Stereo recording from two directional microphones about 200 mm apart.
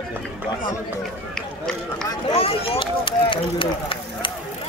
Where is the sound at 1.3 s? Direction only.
5° left (ahead or behind).